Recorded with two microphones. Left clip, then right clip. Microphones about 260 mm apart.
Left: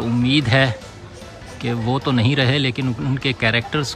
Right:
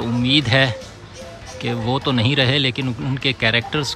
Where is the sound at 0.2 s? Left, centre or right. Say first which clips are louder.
Right 1 dB; centre.